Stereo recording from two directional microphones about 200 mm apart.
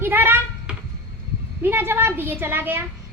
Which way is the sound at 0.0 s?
10° right (ahead or behind).